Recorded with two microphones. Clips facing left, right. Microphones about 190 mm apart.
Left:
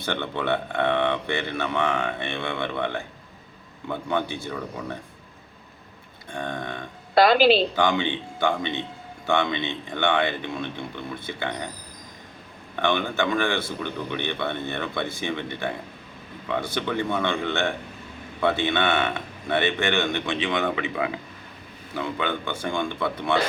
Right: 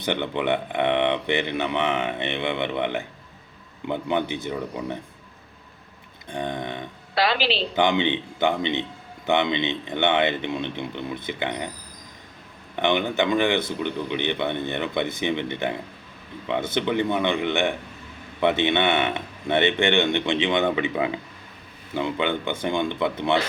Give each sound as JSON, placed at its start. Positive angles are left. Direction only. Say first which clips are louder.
{"t": 0.0, "sound": "speech", "louder": "right 3 dB", "side_deg": -15}
{"t": 6.3, "sound": "speech", "louder": "right 2 dB", "side_deg": -20}
{"t": 7.2, "sound": "a woman's voice", "louder": "left 7 dB", "side_deg": 45}
{"t": 7.8, "sound": "speech", "louder": "right 2 dB", "side_deg": -20}
{"t": 12.7, "sound": "speech", "louder": "right 2 dB", "side_deg": -20}